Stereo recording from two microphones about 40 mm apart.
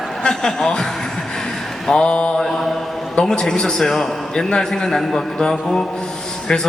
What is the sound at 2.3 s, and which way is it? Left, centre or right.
Speech, centre.